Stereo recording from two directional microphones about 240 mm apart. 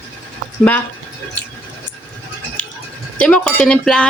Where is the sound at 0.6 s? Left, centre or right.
Centre.